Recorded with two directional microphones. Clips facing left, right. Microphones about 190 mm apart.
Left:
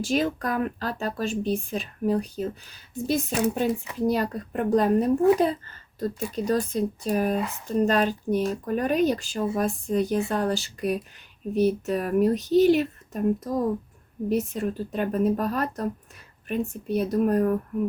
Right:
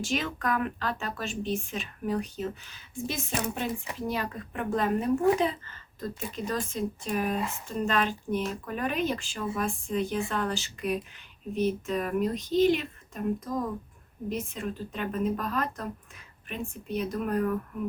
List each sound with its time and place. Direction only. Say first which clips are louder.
0.0 s speech: left 6 dB; 35° left (ahead or behind)